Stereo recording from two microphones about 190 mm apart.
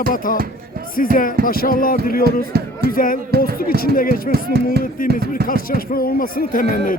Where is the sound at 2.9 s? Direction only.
45° left (ahead or behind).